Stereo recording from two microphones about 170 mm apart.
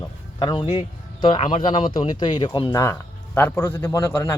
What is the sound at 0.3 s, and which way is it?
A man's voice, 25° left (ahead or behind).